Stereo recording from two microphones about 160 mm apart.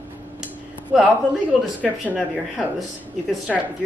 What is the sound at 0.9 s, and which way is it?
Speech, 5° right (ahead or behind).